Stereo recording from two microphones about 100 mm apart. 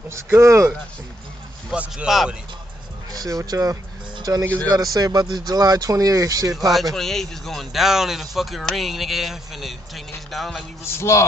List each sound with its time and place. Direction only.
0.1 s speech: 30° right (ahead or behind)
1.7 s a man's voice: 10° right (ahead or behind)
3.1 s speech: 35° right (ahead or behind)
6.7 s speech: centre (ahead or behind)
10.8 s a man's voice: 25° left (ahead or behind)